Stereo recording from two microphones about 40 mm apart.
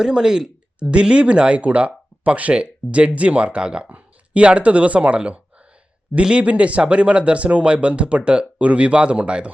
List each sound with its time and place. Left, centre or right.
0.0 s speech: centre
3.8 s speech: right